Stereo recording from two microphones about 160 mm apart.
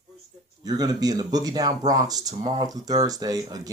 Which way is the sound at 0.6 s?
25° right (ahead or behind).